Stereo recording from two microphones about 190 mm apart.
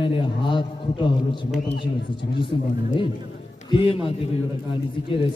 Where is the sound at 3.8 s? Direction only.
30° left (ahead or behind).